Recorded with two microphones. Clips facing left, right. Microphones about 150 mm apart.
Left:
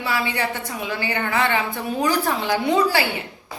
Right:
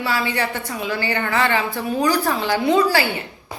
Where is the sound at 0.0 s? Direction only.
20° left (ahead or behind).